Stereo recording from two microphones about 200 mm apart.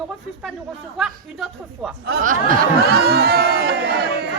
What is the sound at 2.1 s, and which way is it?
Speech, 45° right (ahead or behind).